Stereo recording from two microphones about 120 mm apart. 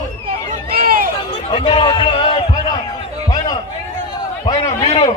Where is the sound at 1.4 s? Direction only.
45° left (ahead or behind).